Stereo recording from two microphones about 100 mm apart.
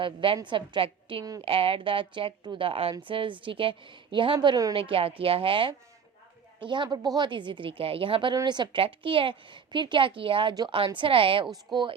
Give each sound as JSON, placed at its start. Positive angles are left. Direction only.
{"t": 0.0, "sound": "speech", "side_deg": -55}
{"t": 3.1, "sound": "a woman's voice", "side_deg": -60}
{"t": 8.8, "sound": "speech", "side_deg": -60}
{"t": 11.5, "sound": "a woman's voice", "side_deg": -50}